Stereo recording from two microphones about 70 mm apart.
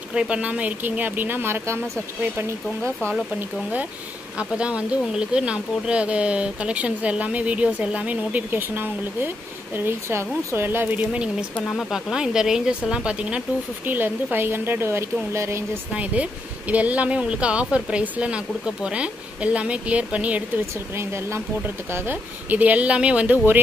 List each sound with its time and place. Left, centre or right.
0.1 s speech: centre; by 1.8 s right
2.8 s speech: centre
4.4 s speech: centre; by 11.0 s right
11.5 s speech: centre
11.9 s speech: centre
13.8 s speech: right
15.9 s speech: centre
20.9 s speech: right; by 23.4 s centre